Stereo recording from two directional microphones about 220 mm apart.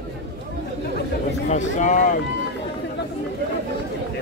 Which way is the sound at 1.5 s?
35° left (ahead or behind).